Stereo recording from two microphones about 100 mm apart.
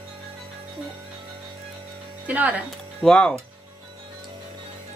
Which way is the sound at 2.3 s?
15° right (ahead or behind).